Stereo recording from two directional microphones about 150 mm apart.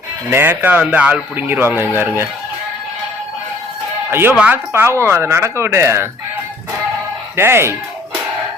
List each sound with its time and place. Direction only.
0.3 s speech: 15° right (ahead or behind)
4.1 s speech: 15° right (ahead or behind)
7.3 s speech: 15° right (ahead or behind)